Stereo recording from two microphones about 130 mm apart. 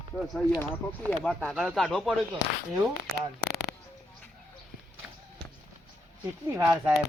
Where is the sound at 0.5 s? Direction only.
15° left (ahead or behind).